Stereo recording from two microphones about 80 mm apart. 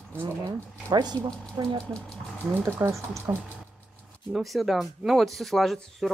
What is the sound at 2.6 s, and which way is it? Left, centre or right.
Speech, right.